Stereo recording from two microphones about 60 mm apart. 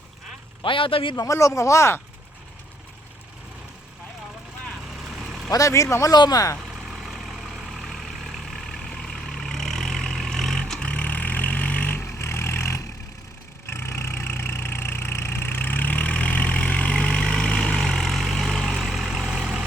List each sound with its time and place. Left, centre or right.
1.1 s speech: left
5.5 s speech: left
6.6 s vehicle: centre
8.8 s vehicle: centre
10.6 s vehicle: centre
12.0 s vehicle: left; by 19.6 s centre